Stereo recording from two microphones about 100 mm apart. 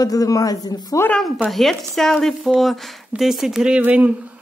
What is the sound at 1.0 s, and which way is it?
Speech, 5° left (ahead or behind).